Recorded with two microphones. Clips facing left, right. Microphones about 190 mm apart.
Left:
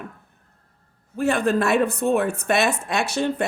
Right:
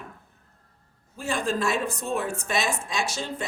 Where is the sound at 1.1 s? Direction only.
60° left (ahead or behind).